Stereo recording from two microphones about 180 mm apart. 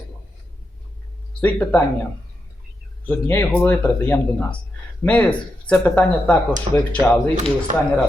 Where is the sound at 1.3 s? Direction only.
10° left (ahead or behind).